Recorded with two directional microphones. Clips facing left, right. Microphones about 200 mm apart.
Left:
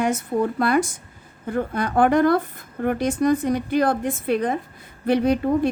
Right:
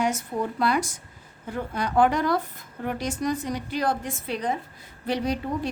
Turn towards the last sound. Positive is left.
turn(degrees=55)  # may be behind; listen again after turning